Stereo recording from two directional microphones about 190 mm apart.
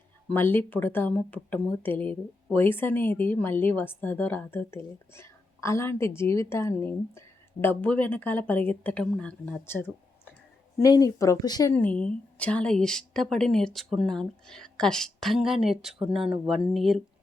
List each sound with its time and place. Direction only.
0.3 s speech: 10° left (ahead or behind)
11.7 s a woman's voice: 10° left (ahead or behind)